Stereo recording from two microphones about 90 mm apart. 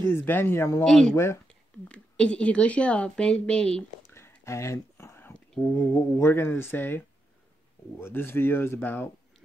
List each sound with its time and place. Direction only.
0.0 s speech: 25° left (ahead or behind)
0.8 s speech: 5° left (ahead or behind)
1.1 s speech: 30° left (ahead or behind)
1.9 s a woman's voice: 10° left (ahead or behind)
4.1 s a sound: 30° left (ahead or behind)
5.6 s speech: 25° left (ahead or behind)